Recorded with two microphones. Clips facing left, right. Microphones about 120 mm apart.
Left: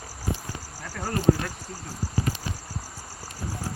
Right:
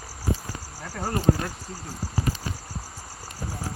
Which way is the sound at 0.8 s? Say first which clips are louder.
Right 2 dB; 15° right (ahead or behind).